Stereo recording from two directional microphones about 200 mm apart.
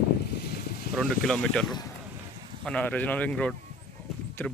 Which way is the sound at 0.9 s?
5° left (ahead or behind).